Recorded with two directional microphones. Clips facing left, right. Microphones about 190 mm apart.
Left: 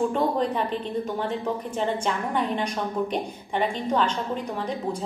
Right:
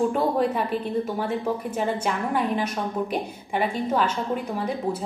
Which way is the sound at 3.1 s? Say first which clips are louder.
Right 1 dB; 5° right (ahead or behind).